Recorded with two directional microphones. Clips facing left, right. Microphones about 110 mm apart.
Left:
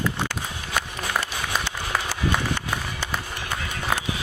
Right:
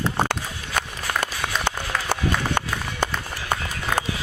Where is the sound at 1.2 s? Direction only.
55° right (ahead or behind).